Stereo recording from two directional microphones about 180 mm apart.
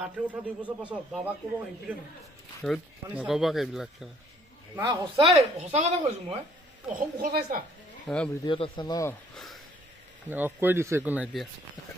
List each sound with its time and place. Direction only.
0.0 s speech: 10° right (ahead or behind)
2.6 s speech: 5° right (ahead or behind)
4.7 s speech: 25° right (ahead or behind)
6.9 s a woman's voice: 50° right (ahead or behind)
8.1 s speech: centre (ahead or behind)
8.5 s a man's voice: 30° left (ahead or behind)
9.3 s a sound: centre (ahead or behind)
10.3 s speech: 10° right (ahead or behind)